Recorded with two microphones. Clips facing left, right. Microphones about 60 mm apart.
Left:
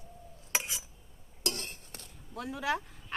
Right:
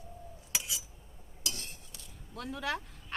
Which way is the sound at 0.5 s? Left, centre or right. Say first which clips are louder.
Left 4 dB; left.